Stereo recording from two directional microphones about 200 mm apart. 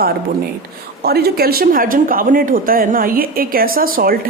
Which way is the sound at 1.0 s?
50° right (ahead or behind).